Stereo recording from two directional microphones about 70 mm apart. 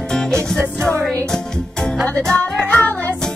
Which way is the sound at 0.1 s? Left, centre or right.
Centre.